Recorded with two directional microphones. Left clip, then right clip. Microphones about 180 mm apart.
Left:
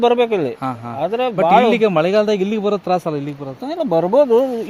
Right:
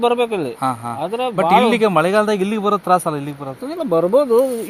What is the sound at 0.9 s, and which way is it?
Speech, 50° left (ahead or behind).